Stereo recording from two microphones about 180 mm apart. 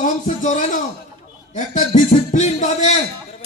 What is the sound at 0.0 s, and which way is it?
A man's voice, 45° left (ahead or behind).